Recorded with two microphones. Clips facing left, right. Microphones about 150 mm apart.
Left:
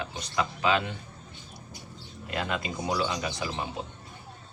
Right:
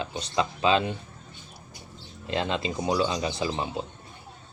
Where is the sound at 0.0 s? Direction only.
25° right (ahead or behind).